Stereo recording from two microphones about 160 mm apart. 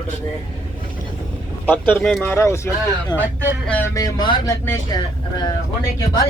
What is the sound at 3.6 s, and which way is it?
Speech, 10° left (ahead or behind).